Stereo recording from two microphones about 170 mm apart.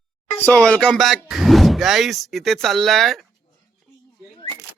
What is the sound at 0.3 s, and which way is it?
Speech, 10° left (ahead or behind).